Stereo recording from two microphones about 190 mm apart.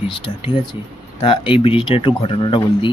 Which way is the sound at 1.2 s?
25° left (ahead or behind).